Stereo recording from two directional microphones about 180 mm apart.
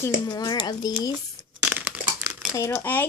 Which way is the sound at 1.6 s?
10° right (ahead or behind).